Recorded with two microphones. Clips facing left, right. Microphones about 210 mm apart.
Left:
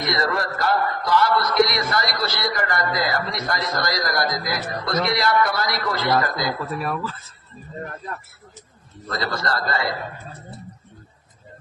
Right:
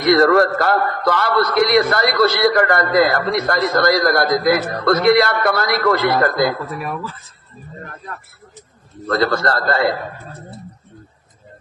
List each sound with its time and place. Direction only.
0.0 s a man's voice: 60° right (ahead or behind)
6.7 s speech: 15° right (ahead or behind)
9.0 s a man's voice: 55° right (ahead or behind)